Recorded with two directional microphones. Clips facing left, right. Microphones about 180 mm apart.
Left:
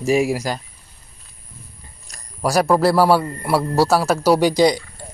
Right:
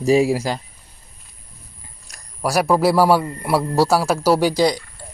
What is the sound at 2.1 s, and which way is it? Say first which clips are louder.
A man's voice: left 2 dB; centre (ahead or behind).